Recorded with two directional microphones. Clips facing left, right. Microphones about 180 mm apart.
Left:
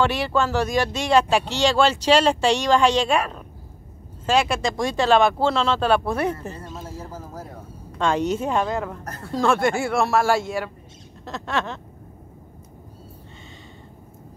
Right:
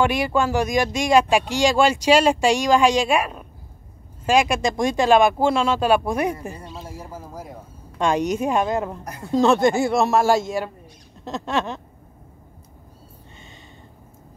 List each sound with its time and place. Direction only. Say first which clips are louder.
0.0 s a woman's voice: right 1 dB; 15° right (ahead or behind)